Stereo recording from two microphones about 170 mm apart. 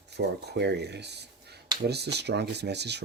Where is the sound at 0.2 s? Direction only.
75° right (ahead or behind).